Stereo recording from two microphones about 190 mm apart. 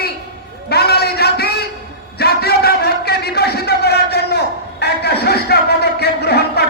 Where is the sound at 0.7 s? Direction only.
55° left (ahead or behind).